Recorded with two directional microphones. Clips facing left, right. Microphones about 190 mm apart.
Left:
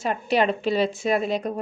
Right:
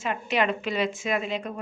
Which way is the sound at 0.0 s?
35° left (ahead or behind).